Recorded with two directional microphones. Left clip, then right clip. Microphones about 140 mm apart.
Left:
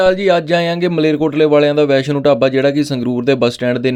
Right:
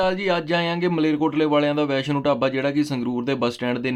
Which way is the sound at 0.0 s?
40° left (ahead or behind).